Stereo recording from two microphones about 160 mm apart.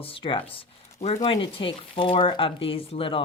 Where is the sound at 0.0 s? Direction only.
35° left (ahead or behind).